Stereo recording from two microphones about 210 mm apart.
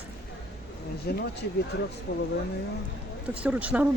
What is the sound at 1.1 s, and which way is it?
Speech, 50° left (ahead or behind).